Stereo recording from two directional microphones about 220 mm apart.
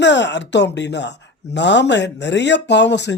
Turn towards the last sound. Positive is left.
turn(degrees=50)  # may be behind; listen again after turning